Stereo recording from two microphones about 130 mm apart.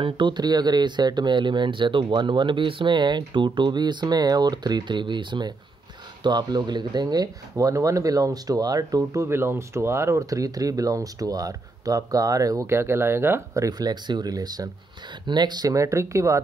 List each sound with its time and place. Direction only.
0.0 s speech: 35° right (ahead or behind); by 13.7 s 20° right (ahead or behind)
13.7 s speech: 30° right (ahead or behind)